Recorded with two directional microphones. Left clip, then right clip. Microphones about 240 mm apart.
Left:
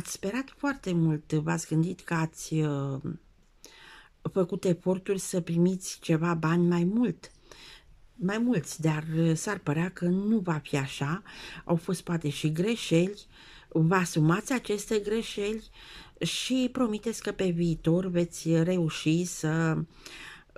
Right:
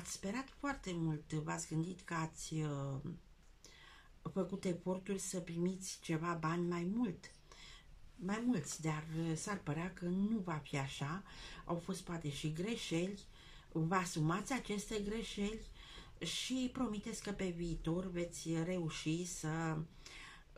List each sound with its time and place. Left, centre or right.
0.0 s speech: left
4.2 s speech: left
8.3 s speech: left